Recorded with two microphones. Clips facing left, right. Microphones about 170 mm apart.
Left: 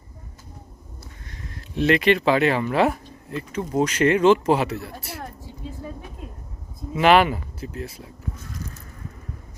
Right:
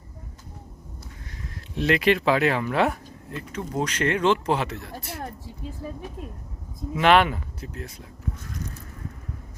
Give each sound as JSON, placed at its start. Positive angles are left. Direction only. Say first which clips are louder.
{"t": 1.3, "sound": "speech", "louder": "left 2 dB", "side_deg": 0}
{"t": 6.9, "sound": "speech", "louder": "left 2 dB", "side_deg": 5}